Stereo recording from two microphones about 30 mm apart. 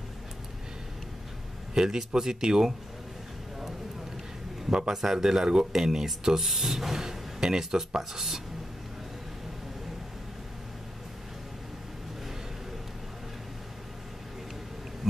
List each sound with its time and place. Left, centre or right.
1.7 s a man's voice: centre
4.6 s a man's voice: right
4.9 s speech: centre